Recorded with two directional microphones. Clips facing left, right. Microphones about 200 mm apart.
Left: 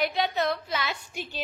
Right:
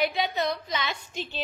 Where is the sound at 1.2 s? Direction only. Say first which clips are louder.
Right 2 dB; 10° left (ahead or behind).